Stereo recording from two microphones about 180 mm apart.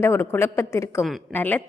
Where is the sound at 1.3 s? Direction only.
10° left (ahead or behind).